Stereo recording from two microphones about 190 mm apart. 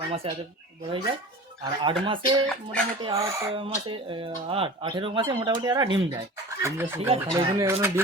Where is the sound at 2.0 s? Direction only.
25° right (ahead or behind).